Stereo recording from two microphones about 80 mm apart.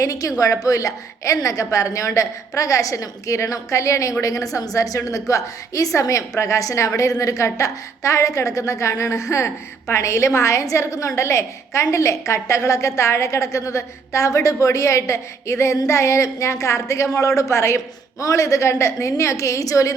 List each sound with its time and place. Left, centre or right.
0.0 s a woman's voice: left